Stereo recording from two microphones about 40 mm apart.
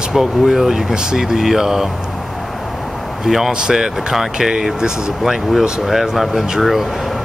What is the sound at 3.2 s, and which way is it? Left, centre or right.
Speech, centre.